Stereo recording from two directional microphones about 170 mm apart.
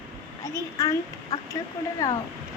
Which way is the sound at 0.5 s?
20° left (ahead or behind).